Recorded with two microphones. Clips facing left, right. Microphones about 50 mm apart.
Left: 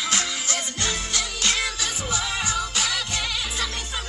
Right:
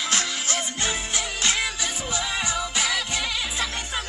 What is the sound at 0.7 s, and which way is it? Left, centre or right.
Music, right.